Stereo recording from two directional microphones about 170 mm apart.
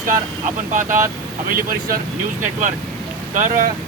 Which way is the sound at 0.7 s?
50° right (ahead or behind).